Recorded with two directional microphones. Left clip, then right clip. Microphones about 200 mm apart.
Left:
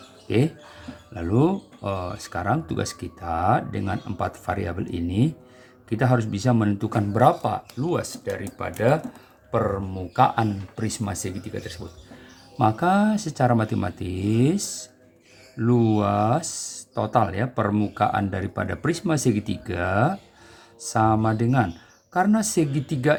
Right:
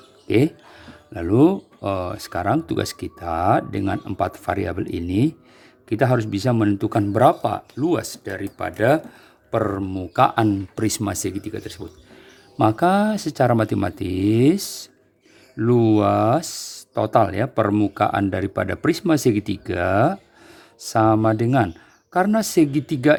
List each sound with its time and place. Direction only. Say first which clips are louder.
0.3 s speech: right 5 dB; 45° right (ahead or behind)